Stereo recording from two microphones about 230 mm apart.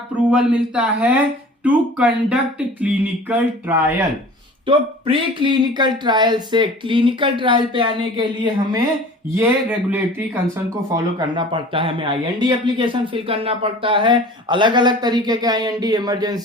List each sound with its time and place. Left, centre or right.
0.3 s speech: centre
4.6 s speech: right
9.3 s speech: centre